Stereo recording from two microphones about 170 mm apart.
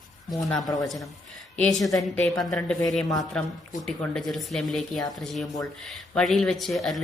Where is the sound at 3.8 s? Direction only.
5° left (ahead or behind).